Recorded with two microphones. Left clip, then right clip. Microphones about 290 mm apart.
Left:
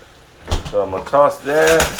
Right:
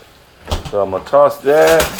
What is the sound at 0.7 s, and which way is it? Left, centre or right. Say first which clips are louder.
Speech: right 3 dB; right.